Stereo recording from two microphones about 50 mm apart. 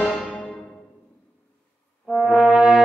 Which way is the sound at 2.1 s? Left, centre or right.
Centre.